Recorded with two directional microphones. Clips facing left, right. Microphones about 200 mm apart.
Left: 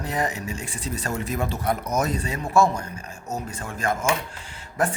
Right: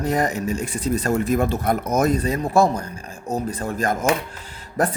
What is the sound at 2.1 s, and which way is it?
Speech, 40° right (ahead or behind).